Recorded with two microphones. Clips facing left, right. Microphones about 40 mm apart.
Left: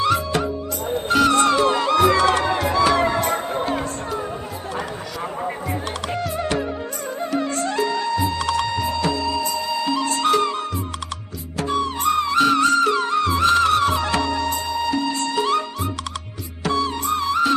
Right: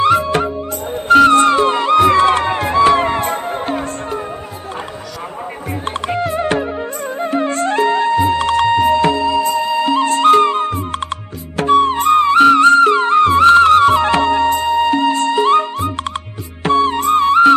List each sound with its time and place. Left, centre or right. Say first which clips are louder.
0.0 s music: right 7 dB; right
1.4 s music: right 5 dB; right
5.8 s music: right 6 dB; right
6.6 s music: right 5 dB; right